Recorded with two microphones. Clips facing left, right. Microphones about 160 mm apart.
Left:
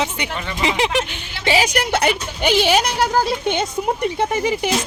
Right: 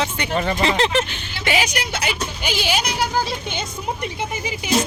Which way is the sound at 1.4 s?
30° left (ahead or behind).